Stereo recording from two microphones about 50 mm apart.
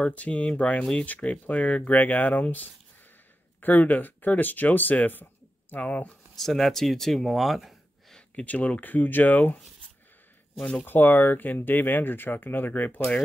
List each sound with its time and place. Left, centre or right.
0.0 s speech: left
6.3 s speech: centre
8.5 s speech: left
10.9 s speech: left